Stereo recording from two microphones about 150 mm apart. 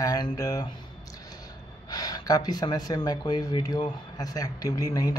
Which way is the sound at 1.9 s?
25° left (ahead or behind).